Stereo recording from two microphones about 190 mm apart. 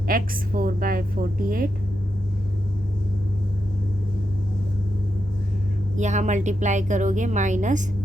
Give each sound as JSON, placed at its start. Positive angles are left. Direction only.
{"t": 0.1, "sound": "a woman's voice", "side_deg": -45}
{"t": 6.0, "sound": "a woman's voice", "side_deg": -40}